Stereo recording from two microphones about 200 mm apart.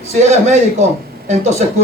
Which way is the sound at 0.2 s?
35° right (ahead or behind).